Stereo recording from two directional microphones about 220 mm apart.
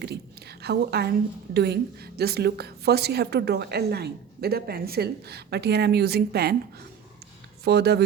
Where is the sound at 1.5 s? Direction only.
50° right (ahead or behind).